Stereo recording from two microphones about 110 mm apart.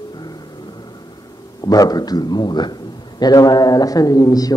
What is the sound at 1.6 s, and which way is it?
A man's voice, 35° left (ahead or behind).